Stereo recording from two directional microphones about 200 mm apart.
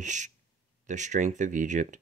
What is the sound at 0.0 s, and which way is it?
Speech, 40° right (ahead or behind).